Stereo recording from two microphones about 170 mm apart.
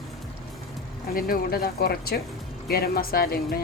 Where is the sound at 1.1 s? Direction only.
60° left (ahead or behind).